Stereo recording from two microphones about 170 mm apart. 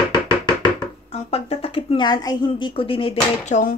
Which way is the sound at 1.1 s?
35° left (ahead or behind).